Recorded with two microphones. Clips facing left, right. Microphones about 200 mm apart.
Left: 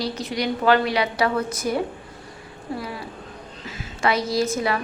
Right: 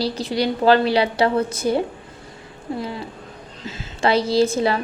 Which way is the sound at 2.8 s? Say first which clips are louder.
Right 3 dB; 25° right (ahead or behind).